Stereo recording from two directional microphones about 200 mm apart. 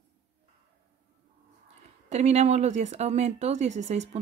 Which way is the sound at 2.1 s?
35° right (ahead or behind).